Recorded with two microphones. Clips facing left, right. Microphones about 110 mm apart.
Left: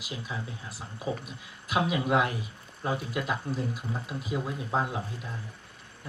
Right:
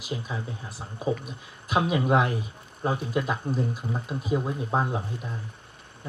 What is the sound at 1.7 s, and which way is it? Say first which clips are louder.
Speech: right 3 dB; 25° right (ahead or behind).